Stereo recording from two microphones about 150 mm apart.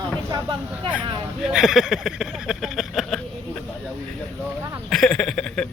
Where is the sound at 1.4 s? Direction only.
5° right (ahead or behind).